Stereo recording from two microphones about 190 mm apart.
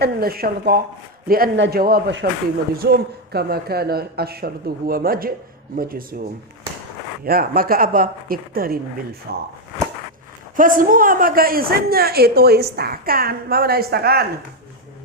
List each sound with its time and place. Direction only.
0.0 s a woman's voice: 55° right (ahead or behind)
7.3 s a woman's voice: 50° right (ahead or behind)
10.6 s a woman's voice: 45° right (ahead or behind)